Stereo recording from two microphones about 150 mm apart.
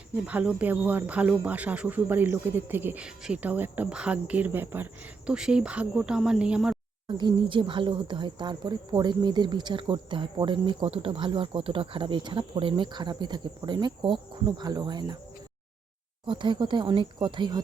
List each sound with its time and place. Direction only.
0.3 s speech: 10° right (ahead or behind)
7.1 s speech: 30° right (ahead or behind)
16.2 s speech: 35° right (ahead or behind)